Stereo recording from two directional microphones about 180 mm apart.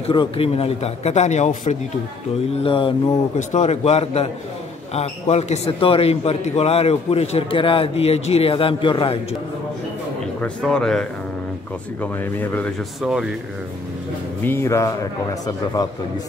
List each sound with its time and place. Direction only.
0.1 s a man's voice: 30° left (ahead or behind)
2.6 s a sound: 30° left (ahead or behind)
3.3 s a man's voice: 40° left (ahead or behind)
10.4 s speech: 5° left (ahead or behind)
13.0 s speech: 5° right (ahead or behind)
14.4 s speech: 15° left (ahead or behind)
15.4 s a sound: 20° left (ahead or behind)